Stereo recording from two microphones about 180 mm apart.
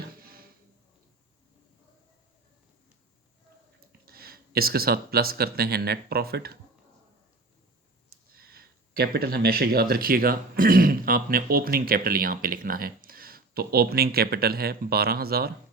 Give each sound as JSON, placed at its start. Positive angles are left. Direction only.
{"t": 0.2, "sound": "music", "side_deg": -55}
{"t": 4.0, "sound": "speech", "side_deg": -60}
{"t": 8.4, "sound": "speech", "side_deg": -55}